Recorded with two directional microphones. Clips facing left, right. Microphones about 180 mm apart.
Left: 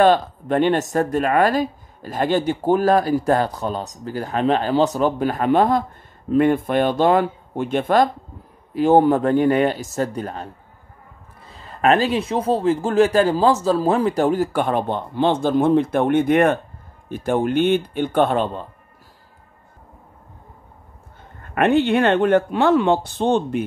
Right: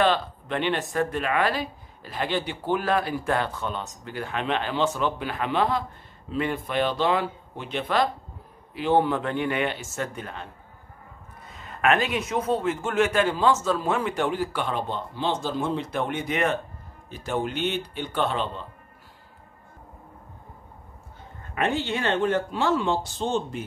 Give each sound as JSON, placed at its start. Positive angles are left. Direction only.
{"t": 0.0, "sound": "a man's voice", "side_deg": 45}
{"t": 21.4, "sound": "speech", "side_deg": 60}